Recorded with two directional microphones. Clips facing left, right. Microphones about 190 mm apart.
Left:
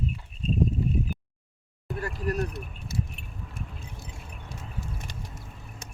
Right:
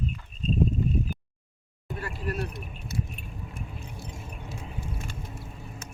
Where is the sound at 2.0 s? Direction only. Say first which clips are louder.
Left 3 dB; 40° left (ahead or behind).